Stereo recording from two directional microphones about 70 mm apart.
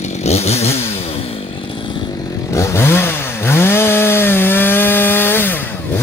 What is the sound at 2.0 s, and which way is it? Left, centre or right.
Chainsaw, left.